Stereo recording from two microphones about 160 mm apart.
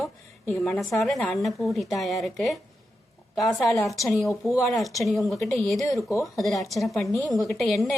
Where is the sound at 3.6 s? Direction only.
Centre (ahead or behind).